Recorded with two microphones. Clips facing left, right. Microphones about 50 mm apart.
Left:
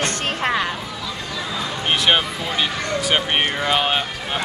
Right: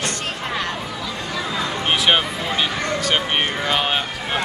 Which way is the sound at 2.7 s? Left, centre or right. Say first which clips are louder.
Right 1 dB; centre.